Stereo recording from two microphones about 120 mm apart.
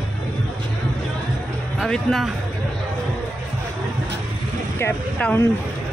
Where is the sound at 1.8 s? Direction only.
5° left (ahead or behind).